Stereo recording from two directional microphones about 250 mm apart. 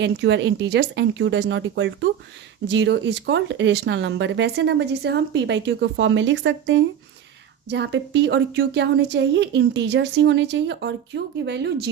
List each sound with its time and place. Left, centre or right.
0.0 s speech: right